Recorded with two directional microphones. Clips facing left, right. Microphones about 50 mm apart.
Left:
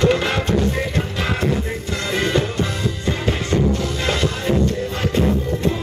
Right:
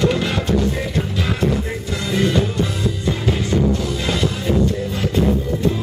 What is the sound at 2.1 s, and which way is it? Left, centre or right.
Music, left.